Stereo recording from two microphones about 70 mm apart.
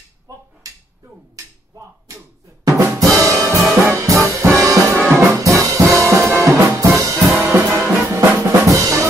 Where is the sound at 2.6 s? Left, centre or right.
Right.